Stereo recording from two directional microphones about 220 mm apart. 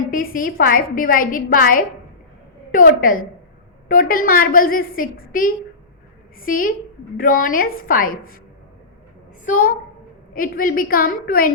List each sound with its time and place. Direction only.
0.1 s a woman's voice: 40° left (ahead or behind)
9.5 s a woman's voice: 40° left (ahead or behind)